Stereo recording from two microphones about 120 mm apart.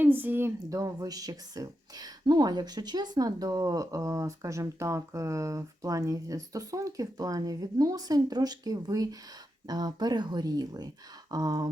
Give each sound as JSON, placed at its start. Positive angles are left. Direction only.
{"t": 0.0, "sound": "speech", "side_deg": -15}